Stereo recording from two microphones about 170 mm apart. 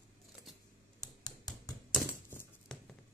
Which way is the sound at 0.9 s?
25° left (ahead or behind).